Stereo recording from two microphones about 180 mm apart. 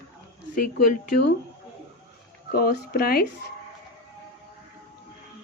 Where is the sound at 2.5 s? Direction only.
60° left (ahead or behind).